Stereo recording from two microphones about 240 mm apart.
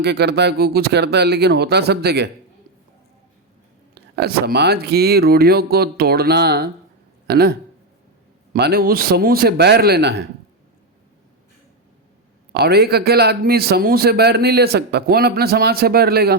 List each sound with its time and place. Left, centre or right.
0.0 s speech: right
4.1 s a man's voice: right
8.5 s a man's voice: right
12.5 s a man's voice: right